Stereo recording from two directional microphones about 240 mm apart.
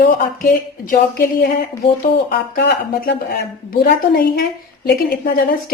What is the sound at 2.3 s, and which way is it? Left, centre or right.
Speech, left.